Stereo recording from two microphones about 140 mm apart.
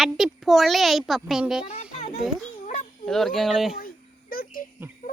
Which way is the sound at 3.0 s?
5° left (ahead or behind).